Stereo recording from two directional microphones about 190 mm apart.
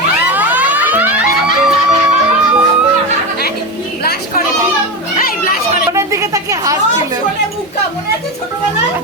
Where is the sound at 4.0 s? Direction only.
55° left (ahead or behind).